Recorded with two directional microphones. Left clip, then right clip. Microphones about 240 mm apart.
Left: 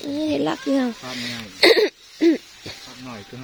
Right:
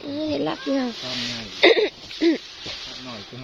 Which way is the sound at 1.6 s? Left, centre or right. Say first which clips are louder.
Left 1 dB; left.